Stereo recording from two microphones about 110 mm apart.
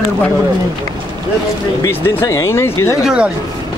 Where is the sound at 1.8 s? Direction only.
20° left (ahead or behind).